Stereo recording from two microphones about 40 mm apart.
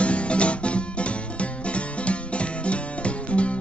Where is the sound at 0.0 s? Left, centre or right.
Left.